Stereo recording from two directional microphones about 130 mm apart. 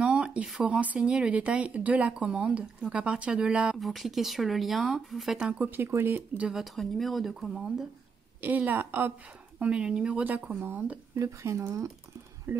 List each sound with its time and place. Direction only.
0.0 s speech: 10° right (ahead or behind)